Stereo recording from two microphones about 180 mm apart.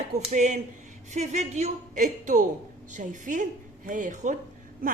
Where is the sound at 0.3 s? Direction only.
40° right (ahead or behind).